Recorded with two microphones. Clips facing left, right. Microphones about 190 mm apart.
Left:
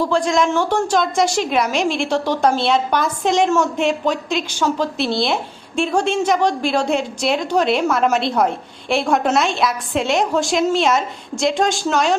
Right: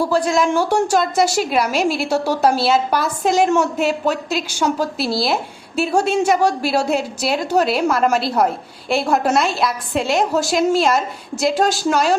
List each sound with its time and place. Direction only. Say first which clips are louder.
0.0 s a woman's voice: even; 5° right (ahead or behind)